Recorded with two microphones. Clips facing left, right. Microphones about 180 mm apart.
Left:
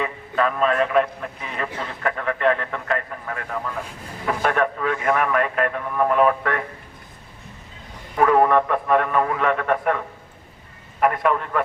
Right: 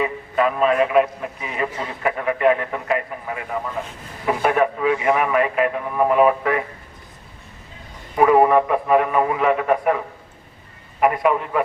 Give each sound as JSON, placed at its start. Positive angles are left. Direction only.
{"t": 0.0, "sound": "a man's voice", "side_deg": -10}
{"t": 8.1, "sound": "a man's voice", "side_deg": -10}
{"t": 11.0, "sound": "a man's voice", "side_deg": -5}